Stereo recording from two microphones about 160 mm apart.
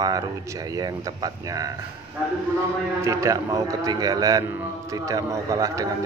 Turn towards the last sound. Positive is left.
turn(degrees=-20)  # may be behind; listen again after turning